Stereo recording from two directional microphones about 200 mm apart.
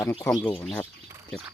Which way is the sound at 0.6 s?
5° left (ahead or behind).